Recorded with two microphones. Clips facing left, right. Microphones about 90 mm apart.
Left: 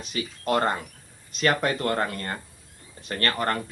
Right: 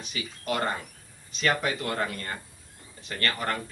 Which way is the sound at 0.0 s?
40° left (ahead or behind).